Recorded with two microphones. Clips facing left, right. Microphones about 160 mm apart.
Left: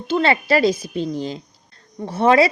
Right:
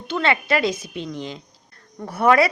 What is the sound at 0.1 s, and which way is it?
A woman's voice, 35° left (ahead or behind).